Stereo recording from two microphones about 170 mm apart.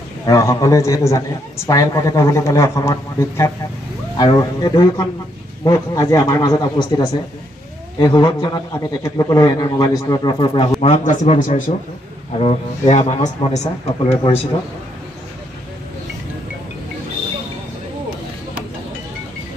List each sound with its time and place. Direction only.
0.3 s a man's voice: 20° left (ahead or behind)
10.9 s a man's voice: 45° left (ahead or behind)
12.4 s a man's voice: 40° left (ahead or behind)